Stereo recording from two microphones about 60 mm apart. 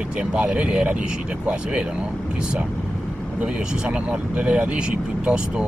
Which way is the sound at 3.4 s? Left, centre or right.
Centre.